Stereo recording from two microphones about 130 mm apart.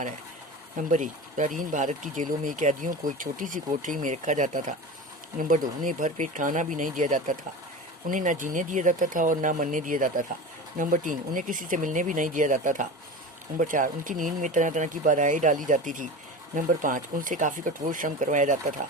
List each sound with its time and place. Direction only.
0.8 s speech: 75° right (ahead or behind)